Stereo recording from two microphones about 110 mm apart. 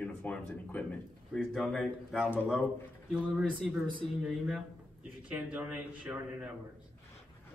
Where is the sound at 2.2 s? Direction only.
20° left (ahead or behind).